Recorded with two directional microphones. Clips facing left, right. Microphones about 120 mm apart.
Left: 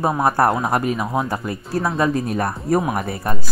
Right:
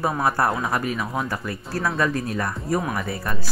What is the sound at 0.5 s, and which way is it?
Speech, 30° left (ahead or behind).